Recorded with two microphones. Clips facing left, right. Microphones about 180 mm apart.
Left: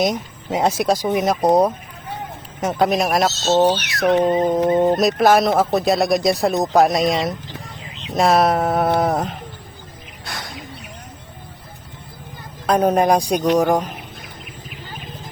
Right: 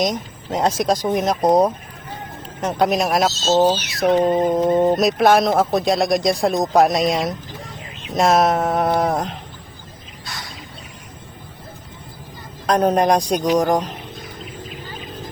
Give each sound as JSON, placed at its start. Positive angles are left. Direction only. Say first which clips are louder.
{"t": 0.0, "sound": "speech", "louder": "left 1 dB", "side_deg": 10}
{"t": 2.6, "sound": "speech", "louder": "even", "side_deg": 5}
{"t": 3.3, "sound": "speech", "louder": "even", "side_deg": 65}
{"t": 3.9, "sound": "speech", "louder": "even", "side_deg": 0}
{"t": 10.2, "sound": "wild animals", "louder": "left 3 dB", "side_deg": 55}
{"t": 12.6, "sound": "speech", "louder": "even", "side_deg": 10}